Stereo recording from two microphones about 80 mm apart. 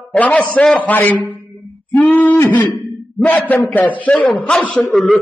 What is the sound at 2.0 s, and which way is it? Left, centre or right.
A man's voice, centre.